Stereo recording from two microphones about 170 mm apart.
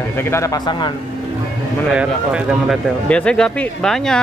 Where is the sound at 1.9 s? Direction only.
5° right (ahead or behind).